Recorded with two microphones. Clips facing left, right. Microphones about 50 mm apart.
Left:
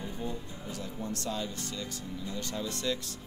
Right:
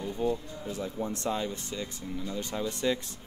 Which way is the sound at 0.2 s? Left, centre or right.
Right.